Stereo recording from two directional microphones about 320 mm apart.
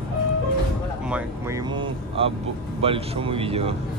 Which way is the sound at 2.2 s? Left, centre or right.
Centre.